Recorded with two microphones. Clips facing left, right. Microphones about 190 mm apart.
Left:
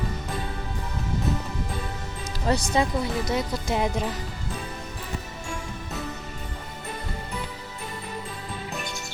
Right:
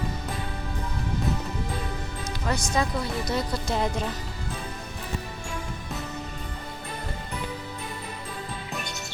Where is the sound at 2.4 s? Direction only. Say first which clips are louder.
Left 4 dB; 30° left (ahead or behind).